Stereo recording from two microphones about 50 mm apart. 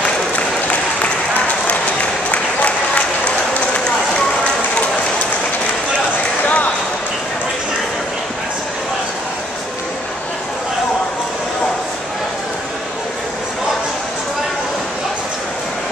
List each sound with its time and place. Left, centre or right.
2.3 s applause: left
6.4 s basketball bounce: left